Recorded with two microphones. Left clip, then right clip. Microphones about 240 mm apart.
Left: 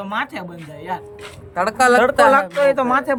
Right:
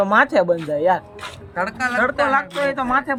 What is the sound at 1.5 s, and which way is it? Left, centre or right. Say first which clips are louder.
A woman's voice: left 8 dB; centre.